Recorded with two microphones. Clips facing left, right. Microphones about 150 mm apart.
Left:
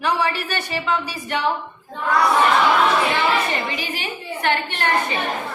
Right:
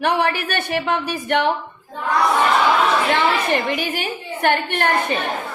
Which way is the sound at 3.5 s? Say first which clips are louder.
Right 5 dB; 60° right (ahead or behind).